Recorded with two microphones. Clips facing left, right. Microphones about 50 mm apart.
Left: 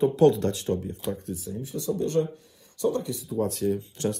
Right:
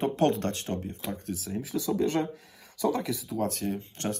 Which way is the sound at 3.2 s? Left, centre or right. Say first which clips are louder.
Left 3 dB; right.